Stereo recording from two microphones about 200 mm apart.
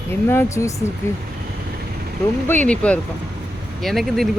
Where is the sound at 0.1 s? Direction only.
10° left (ahead or behind).